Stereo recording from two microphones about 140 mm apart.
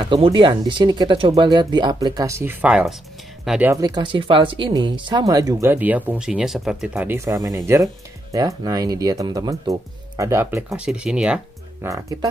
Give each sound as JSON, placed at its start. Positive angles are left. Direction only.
{"t": 0.0, "sound": "speech", "side_deg": -35}
{"t": 2.6, "sound": "speech", "side_deg": -5}
{"t": 3.7, "sound": "speech", "side_deg": -25}
{"t": 5.7, "sound": "speech", "side_deg": -10}
{"t": 7.1, "sound": "speech", "side_deg": -20}
{"t": 10.7, "sound": "speech", "side_deg": -5}
{"t": 11.8, "sound": "speech", "side_deg": -25}